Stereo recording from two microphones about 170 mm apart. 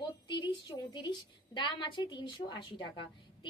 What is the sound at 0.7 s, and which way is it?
A woman's voice, 25° left (ahead or behind).